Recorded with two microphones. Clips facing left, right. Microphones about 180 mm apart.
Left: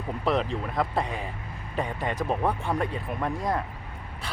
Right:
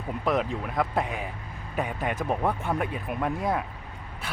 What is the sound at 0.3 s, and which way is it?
Speech, centre (ahead or behind).